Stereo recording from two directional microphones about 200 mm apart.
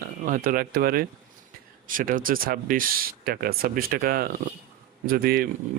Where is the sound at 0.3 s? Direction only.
45° right (ahead or behind).